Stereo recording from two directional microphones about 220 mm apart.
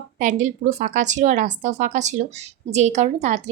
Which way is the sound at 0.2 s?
35° right (ahead or behind).